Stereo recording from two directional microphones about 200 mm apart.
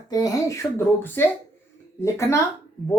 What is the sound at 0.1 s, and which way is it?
A woman's voice, 15° left (ahead or behind).